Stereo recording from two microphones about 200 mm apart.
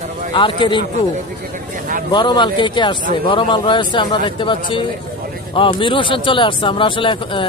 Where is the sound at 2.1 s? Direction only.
20° left (ahead or behind).